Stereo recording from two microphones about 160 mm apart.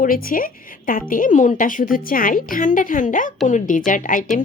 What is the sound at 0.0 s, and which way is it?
A woman's voice, 60° left (ahead or behind).